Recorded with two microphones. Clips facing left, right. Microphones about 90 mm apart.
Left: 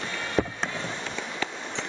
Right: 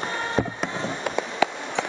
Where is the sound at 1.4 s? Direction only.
90° right.